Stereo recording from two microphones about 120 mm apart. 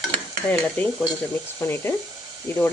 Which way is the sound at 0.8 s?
10° left (ahead or behind).